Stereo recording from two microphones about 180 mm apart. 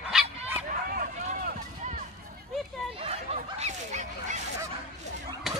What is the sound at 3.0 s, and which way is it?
Snicker, 35° right (ahead or behind).